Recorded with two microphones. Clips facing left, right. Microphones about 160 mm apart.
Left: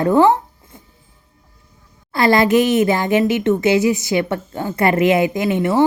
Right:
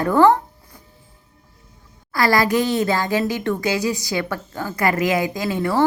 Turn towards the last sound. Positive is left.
turn(degrees=20)  # may be behind; listen again after turning